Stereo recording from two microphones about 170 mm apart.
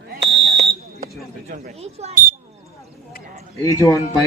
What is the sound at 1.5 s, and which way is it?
Speech, 40° right (ahead or behind).